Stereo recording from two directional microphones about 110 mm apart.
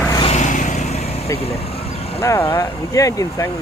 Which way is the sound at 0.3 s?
90° left.